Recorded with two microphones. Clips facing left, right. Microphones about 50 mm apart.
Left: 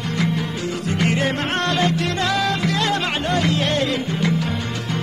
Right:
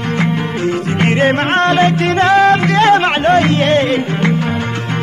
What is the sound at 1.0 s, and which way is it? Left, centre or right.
Music, right.